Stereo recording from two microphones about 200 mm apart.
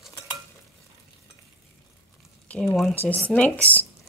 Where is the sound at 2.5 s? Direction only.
5° left (ahead or behind).